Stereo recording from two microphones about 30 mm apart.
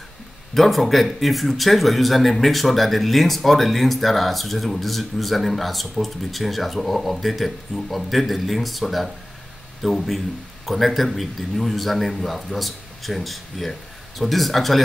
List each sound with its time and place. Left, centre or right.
0.6 s speech: centre